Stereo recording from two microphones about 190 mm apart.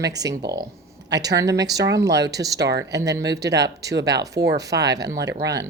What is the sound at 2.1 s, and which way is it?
Speech, 65° right (ahead or behind).